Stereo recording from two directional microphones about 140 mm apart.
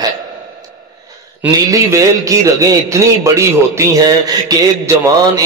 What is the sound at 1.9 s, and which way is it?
A man's voice, 25° right (ahead or behind).